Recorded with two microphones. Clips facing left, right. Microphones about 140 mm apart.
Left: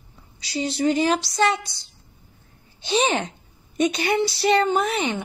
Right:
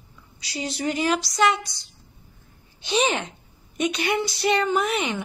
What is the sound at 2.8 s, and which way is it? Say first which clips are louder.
A woman's voice: left 2 dB; 35° left (ahead or behind).